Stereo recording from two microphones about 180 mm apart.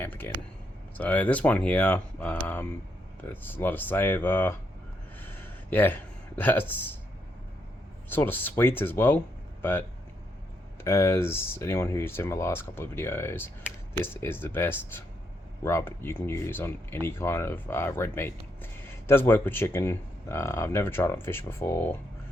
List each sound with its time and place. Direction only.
0.0 s speech: 10° left (ahead or behind)
5.2 s a sound: 10° left (ahead or behind)
8.1 s speech: 10° left (ahead or behind)
10.8 s speech: 15° left (ahead or behind)